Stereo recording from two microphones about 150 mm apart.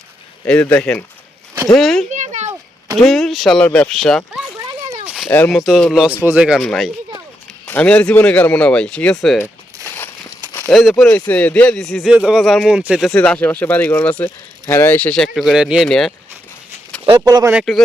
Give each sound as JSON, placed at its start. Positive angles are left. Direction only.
{"t": 0.4, "sound": "speech", "side_deg": 10}
{"t": 2.0, "sound": "a sound", "side_deg": -50}
{"t": 3.1, "sound": "speech", "side_deg": 0}
{"t": 5.0, "sound": "a sound", "side_deg": -5}
{"t": 5.5, "sound": "speech", "side_deg": 0}
{"t": 9.9, "sound": "a sound", "side_deg": 15}
{"t": 10.7, "sound": "speech", "side_deg": 0}
{"t": 13.1, "sound": "speech", "side_deg": 10}
{"t": 17.2, "sound": "speech", "side_deg": -20}
{"t": 17.5, "sound": "speech", "side_deg": 0}